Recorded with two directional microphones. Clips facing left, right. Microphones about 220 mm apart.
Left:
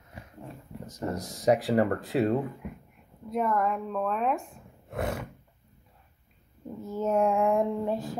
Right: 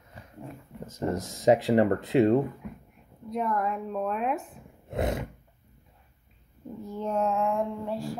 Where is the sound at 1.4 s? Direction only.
20° right (ahead or behind).